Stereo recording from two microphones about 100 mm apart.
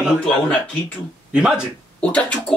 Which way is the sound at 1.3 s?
10° right (ahead or behind).